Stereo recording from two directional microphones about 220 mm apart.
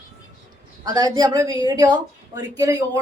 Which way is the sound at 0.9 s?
20° right (ahead or behind).